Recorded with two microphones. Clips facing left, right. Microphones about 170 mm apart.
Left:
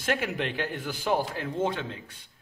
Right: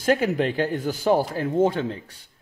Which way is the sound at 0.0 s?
40° right (ahead or behind).